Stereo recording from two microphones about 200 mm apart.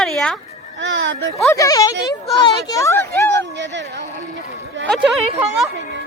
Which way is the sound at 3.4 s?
65° right (ahead or behind).